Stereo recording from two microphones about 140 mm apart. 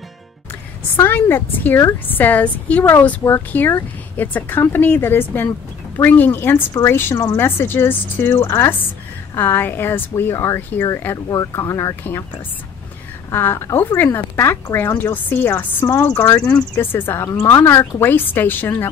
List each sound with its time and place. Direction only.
0.9 s speech: 15° left (ahead or behind)
13.3 s speech: 15° left (ahead or behind)